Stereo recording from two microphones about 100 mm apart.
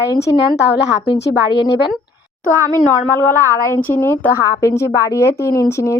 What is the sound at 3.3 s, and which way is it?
A woman's voice, 25° left (ahead or behind).